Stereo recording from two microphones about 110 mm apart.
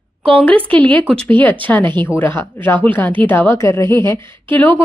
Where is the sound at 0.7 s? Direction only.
10° left (ahead or behind).